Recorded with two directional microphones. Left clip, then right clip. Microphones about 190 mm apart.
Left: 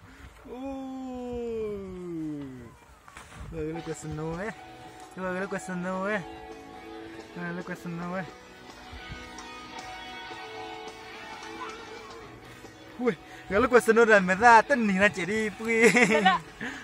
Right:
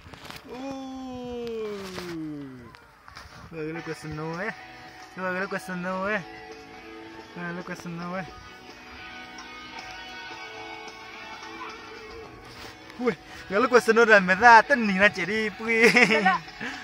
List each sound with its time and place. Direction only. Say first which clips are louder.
0.7 s a sound: even; 5° left (ahead or behind)
3.6 s speech: even; 5° left (ahead or behind)
4.0 s speech: right 2 dB; 5° right (ahead or behind)
7.3 s speech: right 2 dB; 5° right (ahead or behind)
9.8 s music: right 1 dB; 50° left (ahead or behind)
13.0 s speech: right 1 dB; centre (ahead or behind)
16.6 s a sound: right 2 dB; 5° left (ahead or behind)